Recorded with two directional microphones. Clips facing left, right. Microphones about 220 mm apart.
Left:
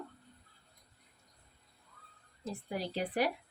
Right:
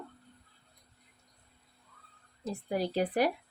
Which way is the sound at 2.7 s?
45° right (ahead or behind).